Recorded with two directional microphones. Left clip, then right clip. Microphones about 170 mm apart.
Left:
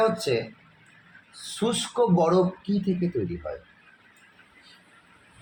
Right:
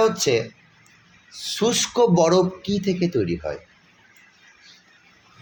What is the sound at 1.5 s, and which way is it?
Speech, 50° right (ahead or behind).